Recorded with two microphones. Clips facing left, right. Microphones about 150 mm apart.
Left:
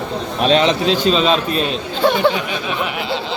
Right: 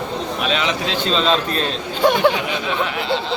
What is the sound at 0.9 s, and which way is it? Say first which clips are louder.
Speech: left 4 dB; 15° left (ahead or behind).